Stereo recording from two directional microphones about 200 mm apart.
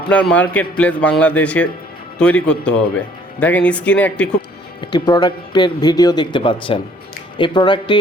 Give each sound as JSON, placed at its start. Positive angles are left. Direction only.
{"t": 0.1, "sound": "a man's voice", "side_deg": 5}
{"t": 4.8, "sound": "a man's voice", "side_deg": 20}